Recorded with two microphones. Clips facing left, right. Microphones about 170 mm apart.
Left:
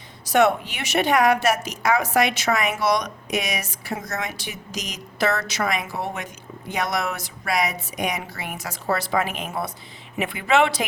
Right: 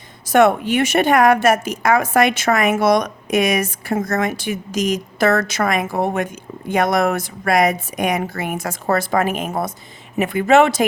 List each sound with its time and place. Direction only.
0.3 s a woman's voice: 50° right (ahead or behind)